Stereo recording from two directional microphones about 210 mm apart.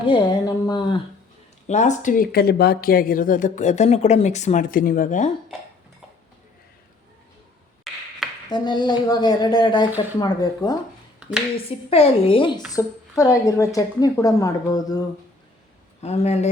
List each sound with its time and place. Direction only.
0.0 s speech: 20° left (ahead or behind)
1.6 s speech: 35° left (ahead or behind)
8.4 s speech: 20° left (ahead or behind)
11.2 s a sound: 5° right (ahead or behind)
11.9 s speech: 25° left (ahead or behind)
16.0 s speech: 30° left (ahead or behind)